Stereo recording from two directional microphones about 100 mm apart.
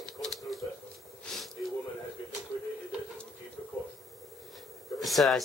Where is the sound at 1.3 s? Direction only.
Centre (ahead or behind).